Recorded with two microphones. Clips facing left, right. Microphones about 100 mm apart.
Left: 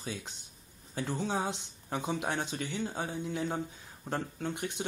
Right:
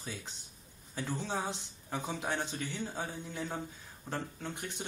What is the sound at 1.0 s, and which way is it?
Speech, 15° left (ahead or behind).